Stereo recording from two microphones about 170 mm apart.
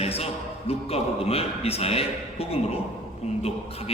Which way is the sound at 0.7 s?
35° left (ahead or behind).